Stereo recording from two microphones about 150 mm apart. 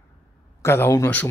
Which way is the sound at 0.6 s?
15° left (ahead or behind).